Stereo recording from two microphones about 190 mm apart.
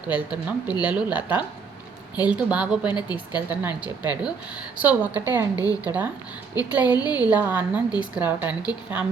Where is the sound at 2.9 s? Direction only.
20° left (ahead or behind).